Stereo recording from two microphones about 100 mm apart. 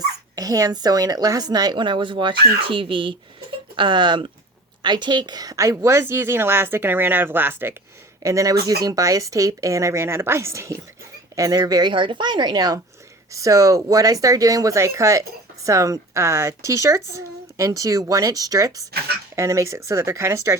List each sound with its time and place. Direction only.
0.3 s a woman's voice: 40° right (ahead or behind); by 7.8 s 20° right (ahead or behind)
8.2 s a woman's voice: 30° right (ahead or behind)